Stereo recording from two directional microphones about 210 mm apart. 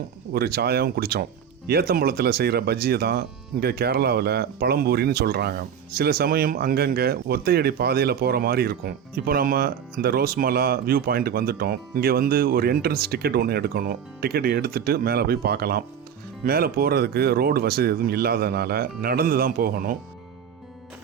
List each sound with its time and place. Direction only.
0.3 s speech: 45° right (ahead or behind)